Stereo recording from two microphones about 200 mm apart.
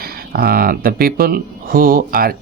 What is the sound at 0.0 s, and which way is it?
Speech, 50° right (ahead or behind).